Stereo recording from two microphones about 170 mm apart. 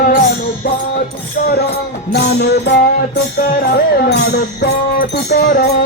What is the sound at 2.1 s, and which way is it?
Music, 75° left (ahead or behind).